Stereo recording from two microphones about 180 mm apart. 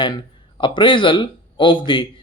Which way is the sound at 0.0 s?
25° left (ahead or behind).